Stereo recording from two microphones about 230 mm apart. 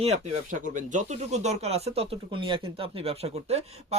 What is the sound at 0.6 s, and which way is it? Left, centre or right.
Speech, right.